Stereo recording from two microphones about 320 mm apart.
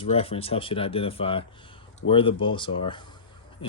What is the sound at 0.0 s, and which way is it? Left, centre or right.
Speech, centre.